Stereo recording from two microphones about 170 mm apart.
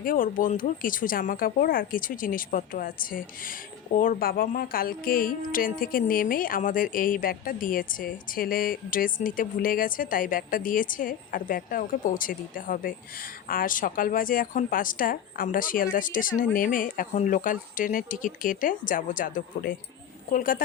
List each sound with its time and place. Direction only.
0.0 s speech: 55° left (ahead or behind)